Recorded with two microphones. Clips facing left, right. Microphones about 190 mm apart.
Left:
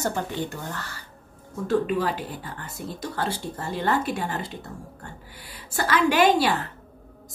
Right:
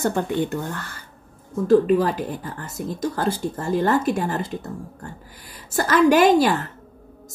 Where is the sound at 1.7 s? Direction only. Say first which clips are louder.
Right 7 dB; 40° right (ahead or behind).